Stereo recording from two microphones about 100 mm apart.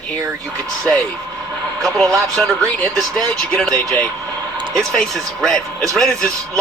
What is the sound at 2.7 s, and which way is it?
Speech, 10° left (ahead or behind).